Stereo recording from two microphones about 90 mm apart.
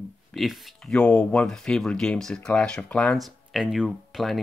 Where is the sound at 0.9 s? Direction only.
15° left (ahead or behind).